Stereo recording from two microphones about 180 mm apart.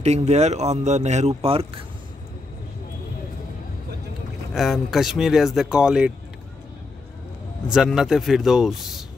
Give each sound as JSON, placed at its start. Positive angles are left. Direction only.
{"t": 0.0, "sound": "speech", "side_deg": -35}
{"t": 4.6, "sound": "speech", "side_deg": 0}
{"t": 7.7, "sound": "speech", "side_deg": -5}